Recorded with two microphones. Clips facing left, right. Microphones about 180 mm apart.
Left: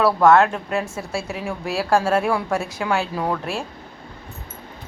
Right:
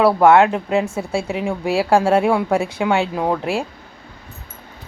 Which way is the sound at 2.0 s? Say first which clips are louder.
Right 3 dB; 20° right (ahead or behind).